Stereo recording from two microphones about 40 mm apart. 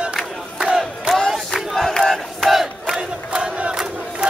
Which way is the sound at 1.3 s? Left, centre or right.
Centre.